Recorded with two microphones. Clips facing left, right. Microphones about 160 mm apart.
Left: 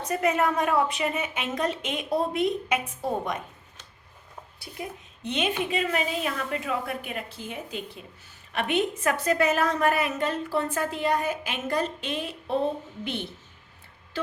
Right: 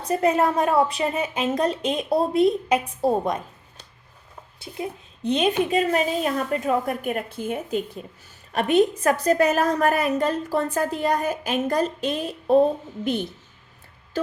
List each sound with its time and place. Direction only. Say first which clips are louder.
0.0 s a woman's voice: right 4 dB; 30° right (ahead or behind)